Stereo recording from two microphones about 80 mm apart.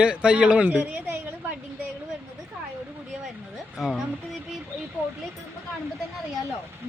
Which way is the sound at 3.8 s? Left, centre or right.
Centre.